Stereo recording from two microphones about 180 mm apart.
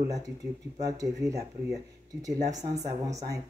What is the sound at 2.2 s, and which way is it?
Speech, 20° right (ahead or behind).